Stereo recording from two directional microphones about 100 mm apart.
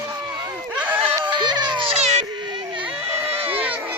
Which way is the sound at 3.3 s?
70° right (ahead or behind).